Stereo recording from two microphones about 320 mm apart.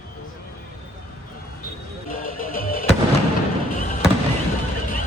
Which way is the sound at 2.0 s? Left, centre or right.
Left.